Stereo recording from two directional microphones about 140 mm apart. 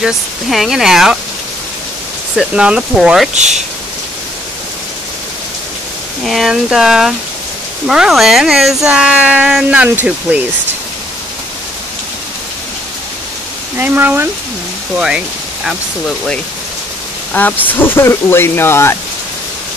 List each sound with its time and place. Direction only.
0.0 s speech: centre (ahead or behind)
2.3 s speech: 5° right (ahead or behind)
3.3 s speech: 55° right (ahead or behind)
6.2 s speech: centre (ahead or behind)
13.7 s speech: 15° right (ahead or behind)
15.0 s speech: 5° right (ahead or behind)
17.3 s speech: 10° left (ahead or behind)